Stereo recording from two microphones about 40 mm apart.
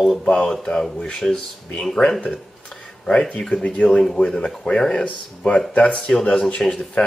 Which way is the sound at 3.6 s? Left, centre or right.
Left.